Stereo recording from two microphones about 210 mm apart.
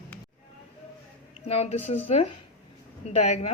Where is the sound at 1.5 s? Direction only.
30° left (ahead or behind).